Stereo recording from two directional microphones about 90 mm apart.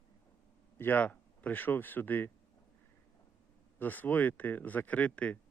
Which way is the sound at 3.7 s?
20° left (ahead or behind).